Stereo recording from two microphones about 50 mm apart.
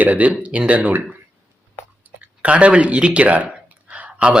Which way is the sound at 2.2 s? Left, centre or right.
Right.